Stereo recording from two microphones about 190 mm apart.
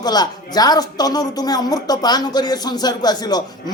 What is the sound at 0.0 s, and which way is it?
A woman's voice, 20° left (ahead or behind).